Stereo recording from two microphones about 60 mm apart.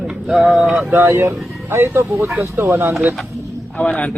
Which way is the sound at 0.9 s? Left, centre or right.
Right.